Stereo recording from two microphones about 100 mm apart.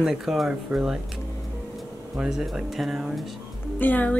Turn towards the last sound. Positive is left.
turn(degrees=15)  # may be behind; listen again after turning